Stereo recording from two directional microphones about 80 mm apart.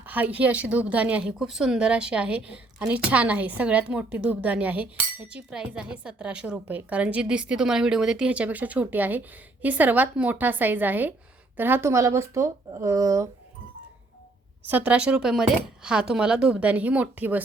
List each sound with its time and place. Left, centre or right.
0.0 s a woman's voice: right
14.6 s a woman's voice: right